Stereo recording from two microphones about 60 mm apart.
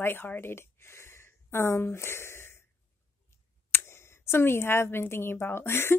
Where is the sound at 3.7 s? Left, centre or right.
Left.